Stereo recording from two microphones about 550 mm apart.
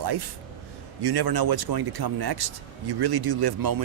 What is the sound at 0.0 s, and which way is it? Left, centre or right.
A man's voice, right.